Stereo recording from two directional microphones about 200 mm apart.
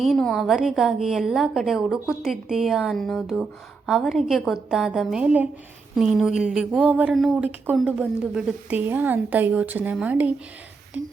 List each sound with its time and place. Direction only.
0.0 s a woman's voice: centre (ahead or behind)